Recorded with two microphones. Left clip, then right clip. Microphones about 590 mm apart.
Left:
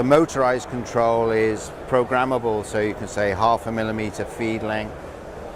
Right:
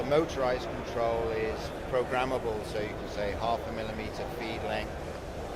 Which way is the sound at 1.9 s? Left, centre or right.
Left.